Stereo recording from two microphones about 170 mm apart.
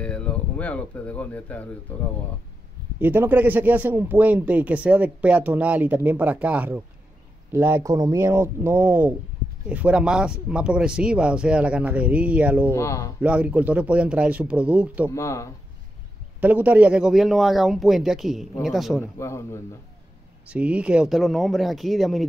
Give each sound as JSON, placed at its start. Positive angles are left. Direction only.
{"t": 0.0, "sound": "speech", "side_deg": 5}
{"t": 3.0, "sound": "speech", "side_deg": -10}
{"t": 12.7, "sound": "speech", "side_deg": 15}
{"t": 13.2, "sound": "speech", "side_deg": -5}
{"t": 15.0, "sound": "speech", "side_deg": 15}
{"t": 16.3, "sound": "a man's voice", "side_deg": -10}
{"t": 19.1, "sound": "speech", "side_deg": 15}
{"t": 20.4, "sound": "a man's voice", "side_deg": -5}